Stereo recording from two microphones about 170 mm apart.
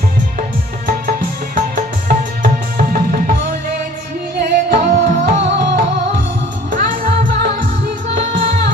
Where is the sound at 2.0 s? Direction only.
55° right (ahead or behind).